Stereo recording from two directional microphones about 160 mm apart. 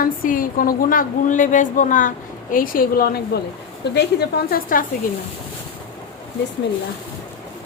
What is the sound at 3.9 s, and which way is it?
Speech, 90° left.